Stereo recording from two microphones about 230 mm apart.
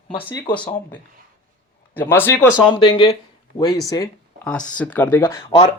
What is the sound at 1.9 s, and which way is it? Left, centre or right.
Speech, centre.